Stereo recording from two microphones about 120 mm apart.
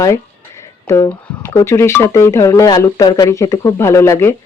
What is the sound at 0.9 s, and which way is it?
Speech, 25° left (ahead or behind).